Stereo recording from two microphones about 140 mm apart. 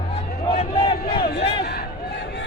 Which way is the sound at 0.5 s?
35° left (ahead or behind).